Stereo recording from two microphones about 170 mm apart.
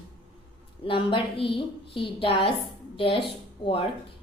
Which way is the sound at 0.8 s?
30° left (ahead or behind).